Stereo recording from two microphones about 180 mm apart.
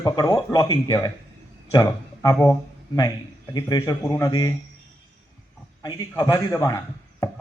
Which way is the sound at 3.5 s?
20° left (ahead or behind).